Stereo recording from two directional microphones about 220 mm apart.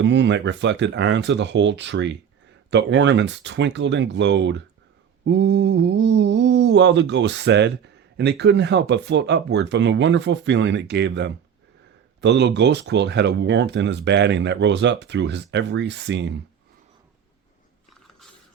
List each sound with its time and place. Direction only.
0.0 s speech: 55° right (ahead or behind)